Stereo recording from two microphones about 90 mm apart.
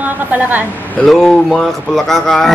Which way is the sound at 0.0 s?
20° right (ahead or behind).